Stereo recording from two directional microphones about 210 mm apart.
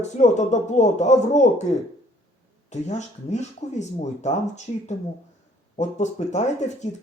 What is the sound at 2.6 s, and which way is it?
Speech, 35° left (ahead or behind).